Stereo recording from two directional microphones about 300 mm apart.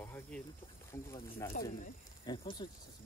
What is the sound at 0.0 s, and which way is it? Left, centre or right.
Snake, centre.